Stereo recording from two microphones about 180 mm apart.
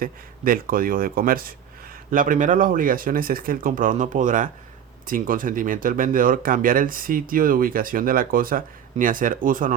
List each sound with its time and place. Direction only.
0.0 s speech: 50° right (ahead or behind)